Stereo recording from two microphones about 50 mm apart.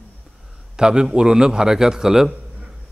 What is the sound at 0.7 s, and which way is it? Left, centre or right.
A man's voice, centre.